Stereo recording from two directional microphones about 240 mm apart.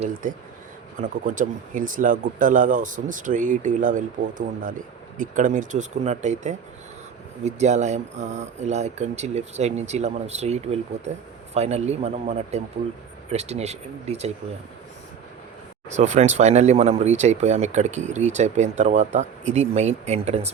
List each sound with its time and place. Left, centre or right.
0.0 s speech: right
16.0 s speech: right